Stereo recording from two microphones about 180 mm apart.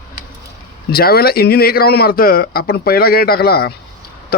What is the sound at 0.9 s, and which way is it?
Speech, 60° left (ahead or behind).